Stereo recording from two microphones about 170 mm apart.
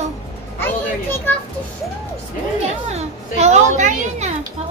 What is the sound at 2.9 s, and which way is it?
A woman's voice, 40° right (ahead or behind).